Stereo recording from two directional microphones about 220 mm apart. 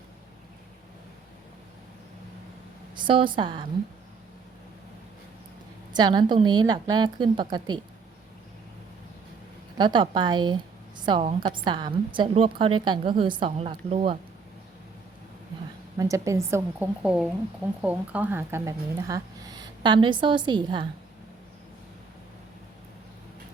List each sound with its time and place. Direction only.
2.9 s a woman's voice: 20° right (ahead or behind)
5.9 s a woman's voice: 20° right (ahead or behind)
9.7 s a woman's voice: 20° right (ahead or behind)
16.0 s a woman's voice: 15° right (ahead or behind)